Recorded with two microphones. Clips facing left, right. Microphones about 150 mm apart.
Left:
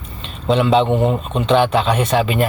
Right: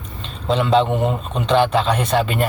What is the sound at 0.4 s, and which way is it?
Speech, centre (ahead or behind).